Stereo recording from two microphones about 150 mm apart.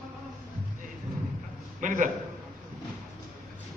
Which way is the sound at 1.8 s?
60° right (ahead or behind).